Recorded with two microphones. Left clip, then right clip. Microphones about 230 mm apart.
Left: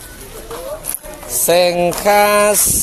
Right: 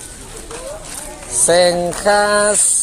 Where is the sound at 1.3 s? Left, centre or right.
Left.